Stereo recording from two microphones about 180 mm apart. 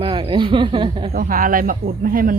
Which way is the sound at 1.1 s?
50° right (ahead or behind).